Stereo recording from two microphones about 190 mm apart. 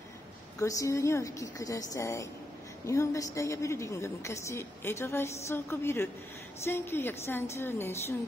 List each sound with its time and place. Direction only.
0.6 s a woman's voice: 15° left (ahead or behind)